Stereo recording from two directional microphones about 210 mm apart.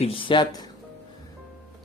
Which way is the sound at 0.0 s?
25° left (ahead or behind).